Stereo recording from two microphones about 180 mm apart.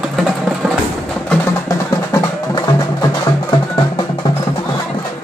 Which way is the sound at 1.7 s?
20° left (ahead or behind).